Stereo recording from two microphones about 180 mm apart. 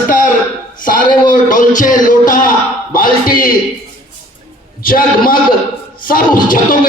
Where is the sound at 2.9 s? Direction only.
50° left (ahead or behind).